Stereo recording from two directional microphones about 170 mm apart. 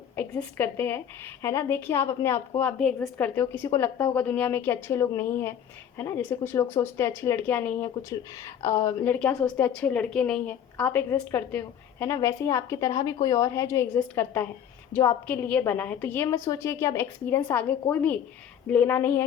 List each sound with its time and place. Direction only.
0.2 s a woman's voice: 10° left (ahead or behind)